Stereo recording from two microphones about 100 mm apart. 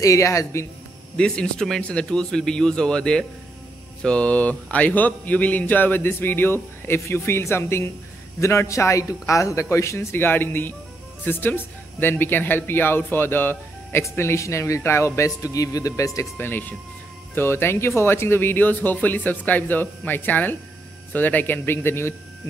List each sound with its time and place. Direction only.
0.0 s speech: 35° left (ahead or behind)
1.1 s a man's voice: 10° left (ahead or behind); by 16.3 s 35° left (ahead or behind)
16.3 s speech: 20° left (ahead or behind)